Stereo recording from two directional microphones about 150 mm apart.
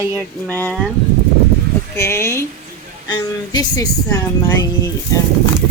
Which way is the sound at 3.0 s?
25° left (ahead or behind).